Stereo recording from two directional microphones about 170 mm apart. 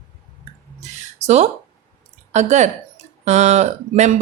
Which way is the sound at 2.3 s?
45° right (ahead or behind).